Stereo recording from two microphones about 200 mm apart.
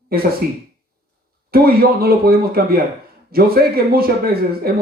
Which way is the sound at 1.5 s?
50° right (ahead or behind).